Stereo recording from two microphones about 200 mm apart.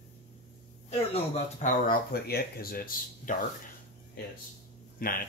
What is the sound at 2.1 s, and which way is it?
Speech, 50° left (ahead or behind).